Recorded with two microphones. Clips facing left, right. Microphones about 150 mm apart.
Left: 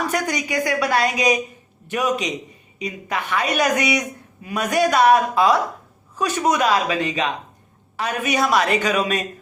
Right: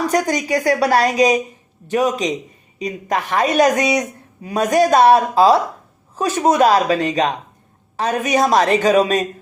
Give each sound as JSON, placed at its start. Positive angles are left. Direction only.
{"t": 0.1, "sound": "a woman's voice", "side_deg": -40}